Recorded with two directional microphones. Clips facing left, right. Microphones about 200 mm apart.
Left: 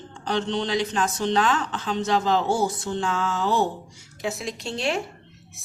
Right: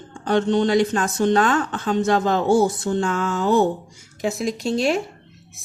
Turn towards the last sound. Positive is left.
turn(degrees=-40)  # may be behind; listen again after turning